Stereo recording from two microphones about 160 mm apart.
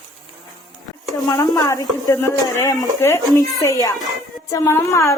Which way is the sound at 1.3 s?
20° left (ahead or behind).